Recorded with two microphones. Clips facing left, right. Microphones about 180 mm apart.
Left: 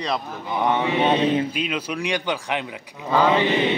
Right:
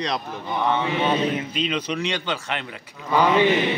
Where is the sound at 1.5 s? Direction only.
5° left (ahead or behind).